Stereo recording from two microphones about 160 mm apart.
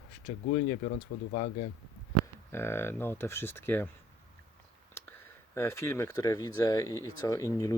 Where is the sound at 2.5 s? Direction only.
15° left (ahead or behind).